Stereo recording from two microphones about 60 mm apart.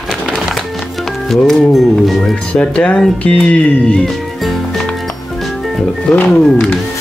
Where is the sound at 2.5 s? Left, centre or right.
Centre.